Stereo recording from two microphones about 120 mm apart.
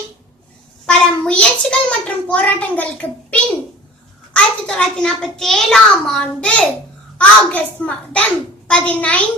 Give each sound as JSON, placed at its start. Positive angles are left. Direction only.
{"t": 0.9, "sound": "a child's voice", "side_deg": 10}